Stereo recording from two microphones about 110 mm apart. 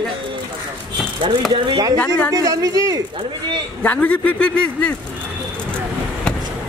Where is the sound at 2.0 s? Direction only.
15° left (ahead or behind).